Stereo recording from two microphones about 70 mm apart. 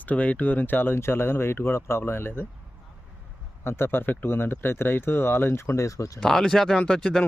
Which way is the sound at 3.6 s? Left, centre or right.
Left.